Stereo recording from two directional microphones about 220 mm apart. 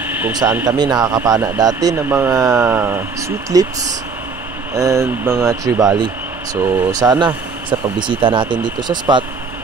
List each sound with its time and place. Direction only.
0.0 s speech: 10° right (ahead or behind)